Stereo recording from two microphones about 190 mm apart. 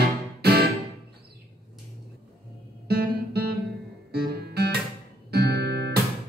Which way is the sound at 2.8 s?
55° right (ahead or behind).